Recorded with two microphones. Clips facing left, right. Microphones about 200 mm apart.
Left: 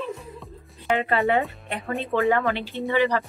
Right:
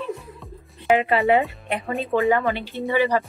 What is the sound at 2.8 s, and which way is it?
Speech, 15° right (ahead or behind).